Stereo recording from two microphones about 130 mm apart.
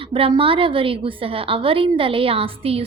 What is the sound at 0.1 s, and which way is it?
A woman's voice, 45° right (ahead or behind).